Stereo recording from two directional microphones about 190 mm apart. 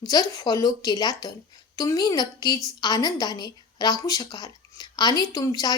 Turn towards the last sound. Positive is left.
turn(degrees=20)  # may be behind; listen again after turning